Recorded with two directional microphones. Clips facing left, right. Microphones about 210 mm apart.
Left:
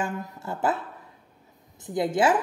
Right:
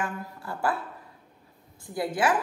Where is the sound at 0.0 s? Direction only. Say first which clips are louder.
Left 3 dB; 25° left (ahead or behind).